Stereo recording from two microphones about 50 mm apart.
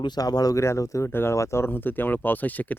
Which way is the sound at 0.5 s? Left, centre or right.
Left.